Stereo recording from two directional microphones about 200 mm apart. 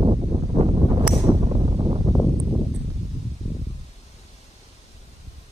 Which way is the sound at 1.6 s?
30° right (ahead or behind).